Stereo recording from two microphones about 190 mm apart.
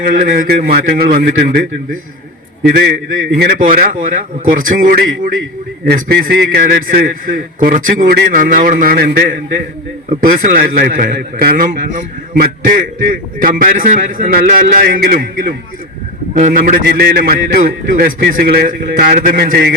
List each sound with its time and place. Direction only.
0.2 s a man's voice: 50° right (ahead or behind)
3.6 s a man's voice: 45° right (ahead or behind)
10.2 s a man's voice: 50° right (ahead or behind)